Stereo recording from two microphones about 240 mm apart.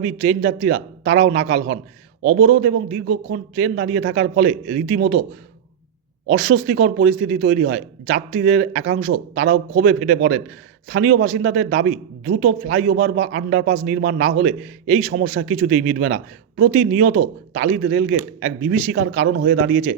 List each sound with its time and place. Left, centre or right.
0.0 s a man's voice: right
6.2 s a man's voice: right
17.9 s speech: right